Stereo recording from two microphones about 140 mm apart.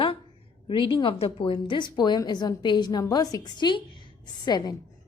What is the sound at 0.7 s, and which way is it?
A woman's voice, 35° left (ahead or behind).